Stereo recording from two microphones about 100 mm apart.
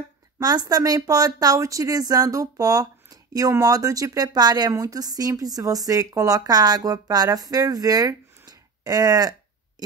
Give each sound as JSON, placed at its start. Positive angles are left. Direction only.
{"t": 0.4, "sound": "speech", "side_deg": -40}